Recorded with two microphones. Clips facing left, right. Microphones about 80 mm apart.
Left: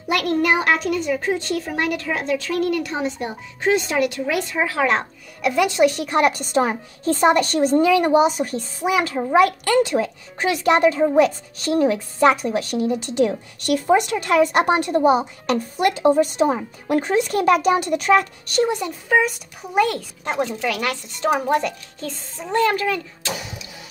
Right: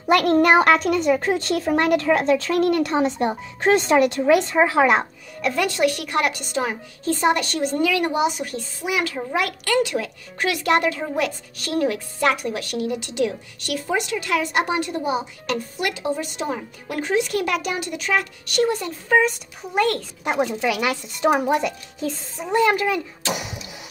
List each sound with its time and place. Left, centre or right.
0.1 s a woman's voice: right
5.4 s a woman's voice: centre; by 13.4 s left
13.7 s a woman's voice: left
16.5 s a woman's voice: left
17.0 s a woman's voice: left
18.7 s speech: centre
20.2 s speech: centre